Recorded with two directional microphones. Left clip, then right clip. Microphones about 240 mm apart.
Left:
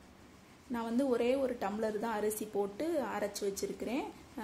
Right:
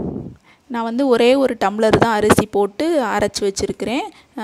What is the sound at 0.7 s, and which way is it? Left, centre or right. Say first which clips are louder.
Speech: right 16 dB; right.